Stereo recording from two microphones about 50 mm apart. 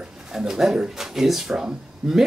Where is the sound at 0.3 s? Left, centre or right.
Centre.